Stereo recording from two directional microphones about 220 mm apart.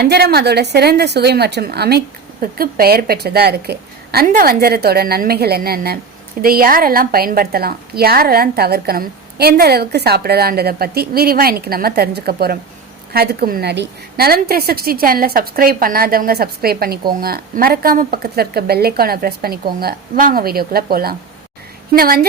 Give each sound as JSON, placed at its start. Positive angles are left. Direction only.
{"t": 0.0, "sound": "a woman's voice", "side_deg": -45}